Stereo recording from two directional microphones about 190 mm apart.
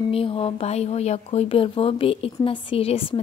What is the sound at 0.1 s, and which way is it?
A woman's voice, 30° left (ahead or behind).